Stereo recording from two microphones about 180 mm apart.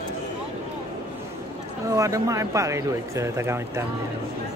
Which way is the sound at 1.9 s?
15° right (ahead or behind).